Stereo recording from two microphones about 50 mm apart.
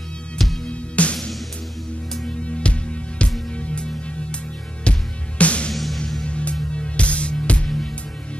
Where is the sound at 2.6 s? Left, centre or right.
Left.